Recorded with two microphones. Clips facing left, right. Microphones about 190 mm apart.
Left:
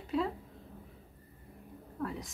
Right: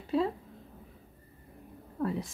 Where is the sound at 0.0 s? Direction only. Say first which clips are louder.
Right 4 dB; 30° right (ahead or behind).